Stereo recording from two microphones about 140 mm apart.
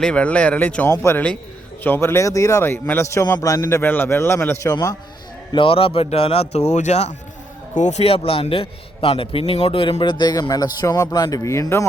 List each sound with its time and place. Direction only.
0.0 s a man's voice: 10° left (ahead or behind)
5.5 s a man's voice: 40° left (ahead or behind); by 11.9 s 20° left (ahead or behind)